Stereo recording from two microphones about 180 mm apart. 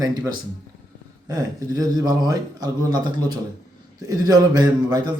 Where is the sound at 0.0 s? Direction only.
20° right (ahead or behind).